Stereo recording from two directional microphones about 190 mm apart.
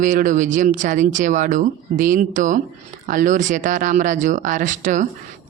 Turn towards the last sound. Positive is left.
turn(degrees=-40)  # may be behind; listen again after turning